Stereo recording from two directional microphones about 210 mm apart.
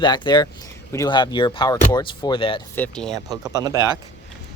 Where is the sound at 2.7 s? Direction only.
5° left (ahead or behind).